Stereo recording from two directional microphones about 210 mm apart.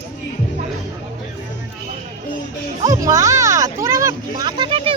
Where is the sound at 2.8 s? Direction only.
15° right (ahead or behind).